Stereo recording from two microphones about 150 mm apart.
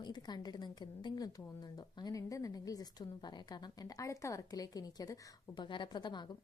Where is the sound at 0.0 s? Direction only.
30° left (ahead or behind).